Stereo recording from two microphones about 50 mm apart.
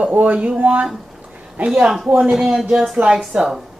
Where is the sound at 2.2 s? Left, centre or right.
Centre.